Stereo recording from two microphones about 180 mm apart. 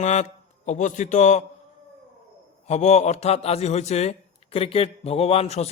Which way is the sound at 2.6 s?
40° left (ahead or behind).